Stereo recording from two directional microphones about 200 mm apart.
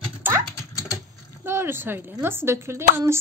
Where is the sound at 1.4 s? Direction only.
10° right (ahead or behind).